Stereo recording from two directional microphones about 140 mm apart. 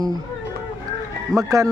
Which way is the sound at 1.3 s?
25° right (ahead or behind).